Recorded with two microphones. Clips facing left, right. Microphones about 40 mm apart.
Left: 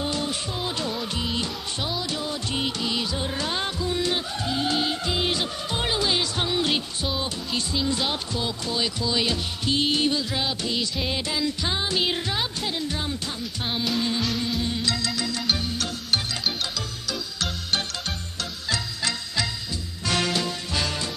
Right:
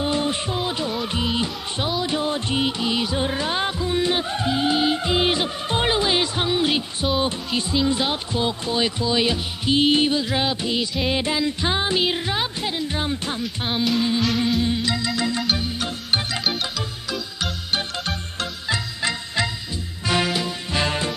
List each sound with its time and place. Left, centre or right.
0.0 s music: right
2.5 s music: centre
7.7 s music: centre
12.0 s music: centre
13.8 s music: centre
18.7 s music: right
20.7 s music: right